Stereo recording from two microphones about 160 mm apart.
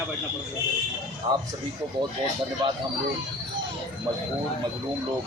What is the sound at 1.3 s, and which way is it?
Speech, 35° right (ahead or behind).